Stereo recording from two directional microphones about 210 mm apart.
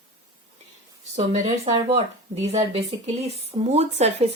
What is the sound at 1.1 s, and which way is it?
Speech, 35° right (ahead or behind).